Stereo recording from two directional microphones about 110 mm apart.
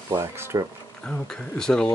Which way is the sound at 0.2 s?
25° right (ahead or behind).